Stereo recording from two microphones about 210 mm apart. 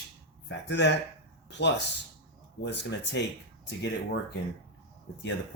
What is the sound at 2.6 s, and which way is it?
Speech, 55° left (ahead or behind).